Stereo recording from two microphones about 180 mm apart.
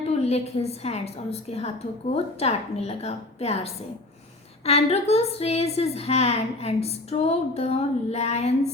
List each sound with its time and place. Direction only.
0.0 s a woman's voice: 35° left (ahead or behind)